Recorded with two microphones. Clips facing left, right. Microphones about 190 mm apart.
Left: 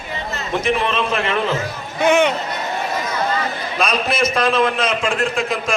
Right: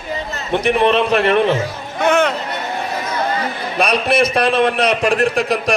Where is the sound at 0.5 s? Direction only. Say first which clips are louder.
Right 5 dB; 60° right (ahead or behind).